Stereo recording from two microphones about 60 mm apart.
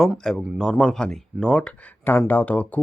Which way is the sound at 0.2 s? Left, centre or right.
Centre.